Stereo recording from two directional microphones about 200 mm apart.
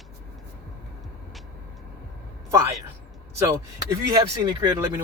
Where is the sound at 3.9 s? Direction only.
20° right (ahead or behind).